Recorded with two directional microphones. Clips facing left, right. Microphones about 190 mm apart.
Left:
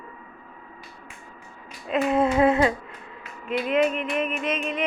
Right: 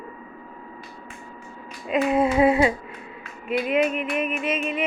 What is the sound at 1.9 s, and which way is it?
Music, 10° right (ahead or behind).